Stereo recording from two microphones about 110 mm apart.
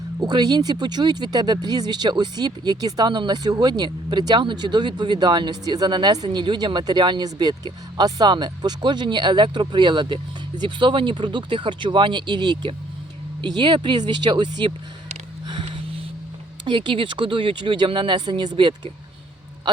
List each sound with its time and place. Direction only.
0.2 s speech: 40° right (ahead or behind)
16.6 s speech: 50° right (ahead or behind)